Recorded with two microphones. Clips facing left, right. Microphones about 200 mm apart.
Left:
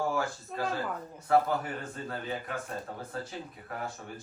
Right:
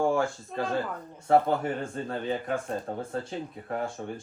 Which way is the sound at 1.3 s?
25° right (ahead or behind).